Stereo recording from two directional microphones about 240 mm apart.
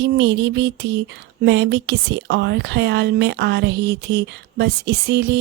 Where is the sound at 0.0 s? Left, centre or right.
Right.